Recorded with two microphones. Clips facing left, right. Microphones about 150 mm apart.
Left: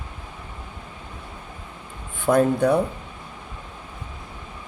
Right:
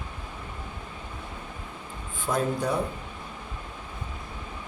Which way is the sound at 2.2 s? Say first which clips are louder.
Left 9 dB; 60° left (ahead or behind).